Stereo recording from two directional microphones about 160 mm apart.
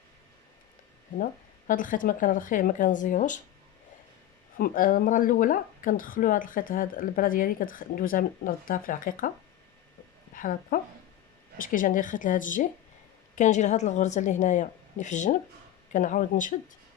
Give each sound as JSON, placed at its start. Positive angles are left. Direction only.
{"t": 1.2, "sound": "speech", "side_deg": 55}
{"t": 4.5, "sound": "speech", "side_deg": 60}
{"t": 10.3, "sound": "a woman's voice", "side_deg": 60}